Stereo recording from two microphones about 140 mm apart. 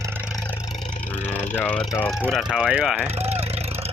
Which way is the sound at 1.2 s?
15° left (ahead or behind).